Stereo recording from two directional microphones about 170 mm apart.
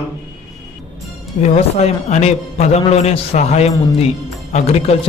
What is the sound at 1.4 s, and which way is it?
A man's voice, 40° left (ahead or behind).